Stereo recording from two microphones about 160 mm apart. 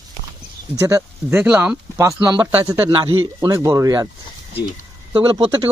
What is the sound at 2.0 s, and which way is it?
Speech, 20° right (ahead or behind).